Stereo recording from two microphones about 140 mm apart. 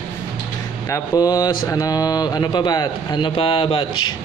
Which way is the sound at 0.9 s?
25° left (ahead or behind).